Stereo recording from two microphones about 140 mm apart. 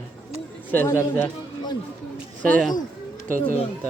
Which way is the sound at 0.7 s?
15° left (ahead or behind).